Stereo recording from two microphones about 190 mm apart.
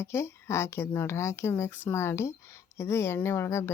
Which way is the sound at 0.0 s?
15° left (ahead or behind).